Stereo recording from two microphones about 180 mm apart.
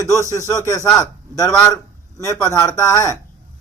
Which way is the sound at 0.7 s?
15° left (ahead or behind).